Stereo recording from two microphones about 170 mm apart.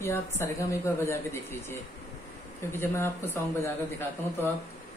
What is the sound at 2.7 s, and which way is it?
Speech, 15° left (ahead or behind).